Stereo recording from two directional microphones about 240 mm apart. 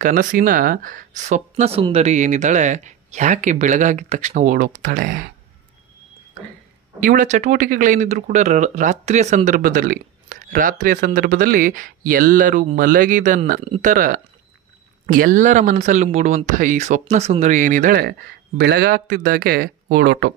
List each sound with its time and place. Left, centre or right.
0.0 s speech: right
7.0 s speech: right